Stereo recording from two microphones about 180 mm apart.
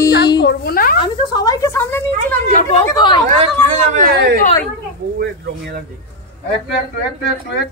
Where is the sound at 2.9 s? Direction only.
25° left (ahead or behind).